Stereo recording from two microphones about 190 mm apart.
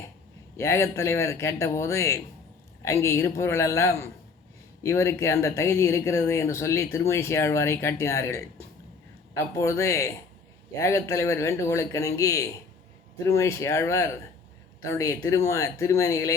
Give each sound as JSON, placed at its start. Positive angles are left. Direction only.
{"t": 0.5, "sound": "speech", "side_deg": 15}